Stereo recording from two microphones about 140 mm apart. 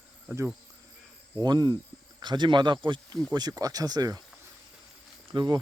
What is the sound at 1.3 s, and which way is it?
Speech, 30° right (ahead or behind).